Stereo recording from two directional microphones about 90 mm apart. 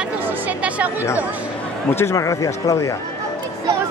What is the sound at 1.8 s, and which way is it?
Speech, 25° left (ahead or behind).